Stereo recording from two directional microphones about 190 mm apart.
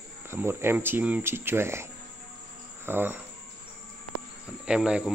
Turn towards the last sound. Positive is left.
turn(degrees=-5)  # may be behind; listen again after turning